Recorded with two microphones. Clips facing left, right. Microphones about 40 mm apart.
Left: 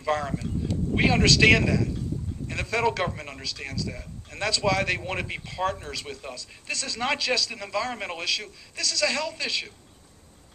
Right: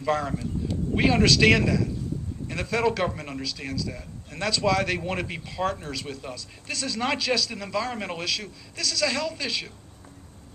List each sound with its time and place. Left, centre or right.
0.0 s a man's voice: centre